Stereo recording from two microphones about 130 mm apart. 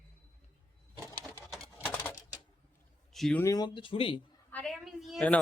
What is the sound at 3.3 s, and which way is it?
Speech, 25° left (ahead or behind).